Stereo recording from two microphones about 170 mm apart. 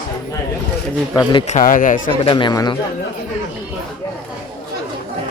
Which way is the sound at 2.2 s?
30° left (ahead or behind).